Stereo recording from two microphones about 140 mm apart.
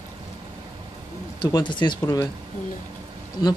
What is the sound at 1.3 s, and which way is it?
Speech, 30° left (ahead or behind).